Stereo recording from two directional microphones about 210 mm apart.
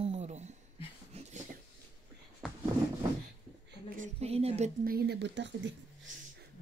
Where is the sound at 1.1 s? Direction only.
30° right (ahead or behind).